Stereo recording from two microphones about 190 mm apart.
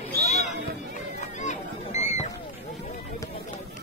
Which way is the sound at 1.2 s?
40° left (ahead or behind).